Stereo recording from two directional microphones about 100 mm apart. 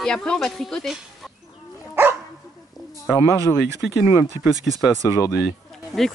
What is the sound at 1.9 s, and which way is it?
Dog, 20° right (ahead or behind).